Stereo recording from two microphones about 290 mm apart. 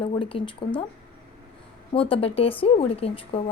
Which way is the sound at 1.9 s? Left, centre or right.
Centre.